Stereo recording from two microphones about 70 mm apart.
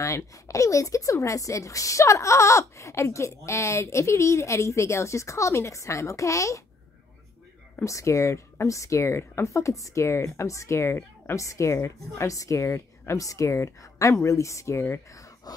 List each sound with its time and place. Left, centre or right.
0.0 s a woman's voice: left
7.8 s a woman's voice: left